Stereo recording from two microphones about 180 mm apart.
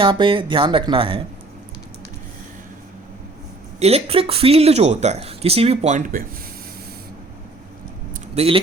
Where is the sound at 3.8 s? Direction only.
35° right (ahead or behind).